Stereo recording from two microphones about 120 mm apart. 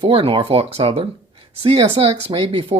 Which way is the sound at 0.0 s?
50° right (ahead or behind).